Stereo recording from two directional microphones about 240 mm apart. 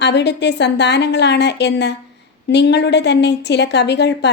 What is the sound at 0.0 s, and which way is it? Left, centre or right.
A woman's voice, left.